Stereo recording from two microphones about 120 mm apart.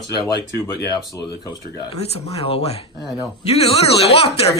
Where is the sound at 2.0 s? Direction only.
55° left (ahead or behind).